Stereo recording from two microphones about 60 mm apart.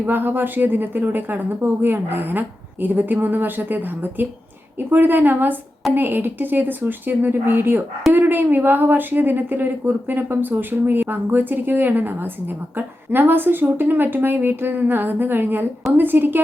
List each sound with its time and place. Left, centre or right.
0.0 s speech: right